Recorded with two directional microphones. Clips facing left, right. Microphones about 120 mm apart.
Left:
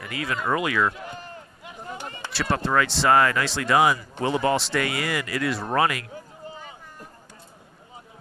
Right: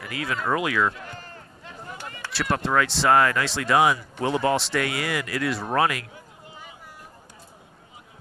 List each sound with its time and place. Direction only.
0.0 s speech: centre (ahead or behind)
0.9 s sheep: 20° left (ahead or behind)
1.9 s a sound: 25° left (ahead or behind)
2.5 s speech: centre (ahead or behind)